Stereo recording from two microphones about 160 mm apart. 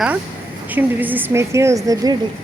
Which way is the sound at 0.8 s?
10° right (ahead or behind).